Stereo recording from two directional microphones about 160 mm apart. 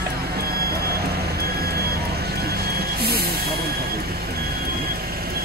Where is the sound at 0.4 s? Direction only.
75° right (ahead or behind).